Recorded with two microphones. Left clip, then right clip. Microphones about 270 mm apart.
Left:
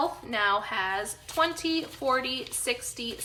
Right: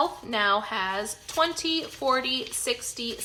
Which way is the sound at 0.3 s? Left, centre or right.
Centre.